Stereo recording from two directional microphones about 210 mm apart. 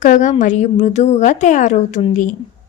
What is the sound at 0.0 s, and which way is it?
A woman's voice, 35° left (ahead or behind).